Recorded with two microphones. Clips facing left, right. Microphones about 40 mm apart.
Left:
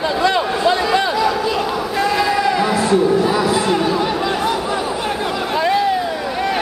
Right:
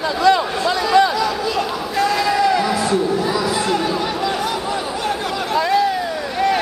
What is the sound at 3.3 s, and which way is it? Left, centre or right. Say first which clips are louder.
Chatter: left 3 dB; left.